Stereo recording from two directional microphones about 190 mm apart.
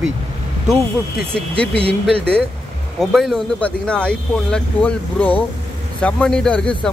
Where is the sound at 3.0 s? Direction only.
Centre (ahead or behind).